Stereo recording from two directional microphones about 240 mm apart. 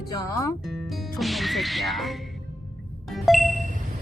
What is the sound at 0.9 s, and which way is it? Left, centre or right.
Speech, centre.